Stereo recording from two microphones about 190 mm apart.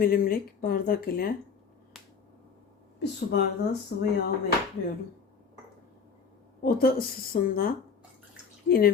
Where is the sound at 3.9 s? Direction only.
50° left (ahead or behind).